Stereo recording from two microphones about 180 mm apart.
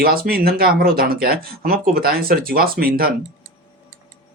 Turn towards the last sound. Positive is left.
turn(degrees=-55)  # may be behind; listen again after turning